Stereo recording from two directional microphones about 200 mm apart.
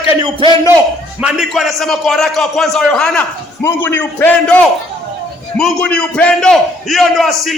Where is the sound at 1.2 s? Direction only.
5° right (ahead or behind).